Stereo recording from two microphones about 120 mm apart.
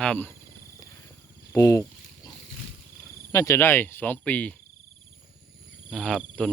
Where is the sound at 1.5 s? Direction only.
25° left (ahead or behind).